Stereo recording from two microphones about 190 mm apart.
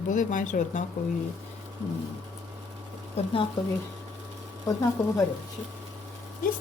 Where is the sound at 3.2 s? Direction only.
30° left (ahead or behind).